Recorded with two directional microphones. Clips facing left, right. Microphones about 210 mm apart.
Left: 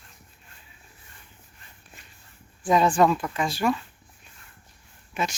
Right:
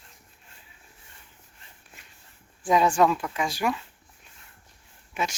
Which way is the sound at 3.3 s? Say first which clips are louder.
Left 2 dB; 10° right (ahead or behind).